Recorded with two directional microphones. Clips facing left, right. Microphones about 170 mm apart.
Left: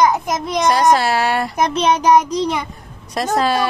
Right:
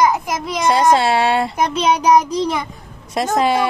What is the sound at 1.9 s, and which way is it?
Child singing, centre (ahead or behind).